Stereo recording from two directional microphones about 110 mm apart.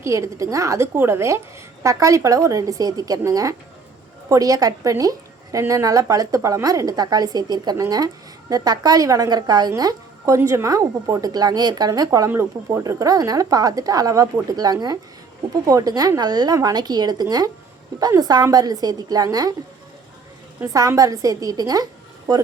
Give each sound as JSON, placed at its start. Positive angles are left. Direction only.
{"t": 0.0, "sound": "a woman's voice", "side_deg": -30}
{"t": 20.7, "sound": "a woman's voice", "side_deg": -30}